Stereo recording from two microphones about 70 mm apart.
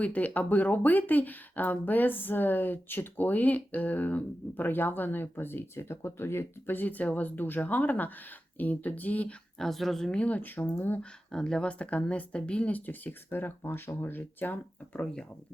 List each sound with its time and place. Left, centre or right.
0.0 s speech: left
9.6 s a woman's voice: centre; by 11.0 s left
11.3 s speech: centre; by 15.0 s left